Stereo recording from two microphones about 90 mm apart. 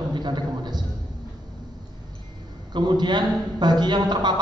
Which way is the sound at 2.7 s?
55° right (ahead or behind).